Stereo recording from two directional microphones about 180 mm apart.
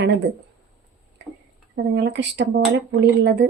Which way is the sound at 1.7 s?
75° right (ahead or behind).